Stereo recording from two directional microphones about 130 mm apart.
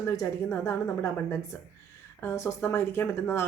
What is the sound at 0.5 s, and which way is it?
Speech, 20° left (ahead or behind).